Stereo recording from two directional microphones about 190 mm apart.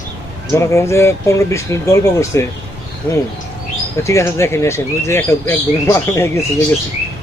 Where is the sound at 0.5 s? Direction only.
15° left (ahead or behind).